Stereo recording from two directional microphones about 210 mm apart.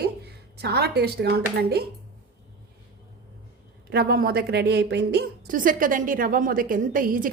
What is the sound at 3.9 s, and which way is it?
A woman's voice, 45° right (ahead or behind).